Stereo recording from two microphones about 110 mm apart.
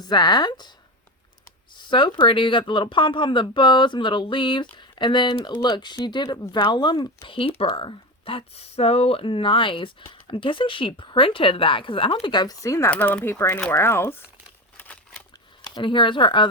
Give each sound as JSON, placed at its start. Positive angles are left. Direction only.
{"t": 0.0, "sound": "speech", "side_deg": 40}
{"t": 1.7, "sound": "speech", "side_deg": 45}
{"t": 6.2, "sound": "speech", "side_deg": 30}
{"t": 6.5, "sound": "speech", "side_deg": 45}
{"t": 12.9, "sound": "speech", "side_deg": 15}
{"t": 14.8, "sound": "a sound", "side_deg": 15}
{"t": 15.7, "sound": "speech", "side_deg": 45}